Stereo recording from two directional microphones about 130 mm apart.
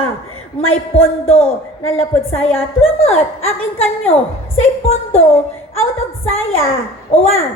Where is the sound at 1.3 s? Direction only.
50° left (ahead or behind).